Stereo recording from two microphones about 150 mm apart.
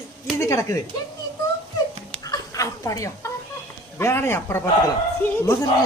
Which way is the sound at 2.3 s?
20° left (ahead or behind).